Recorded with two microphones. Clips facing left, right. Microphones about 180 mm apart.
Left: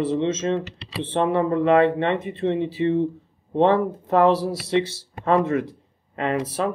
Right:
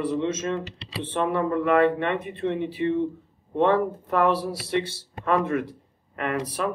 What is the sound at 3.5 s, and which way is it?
Speech, 25° left (ahead or behind).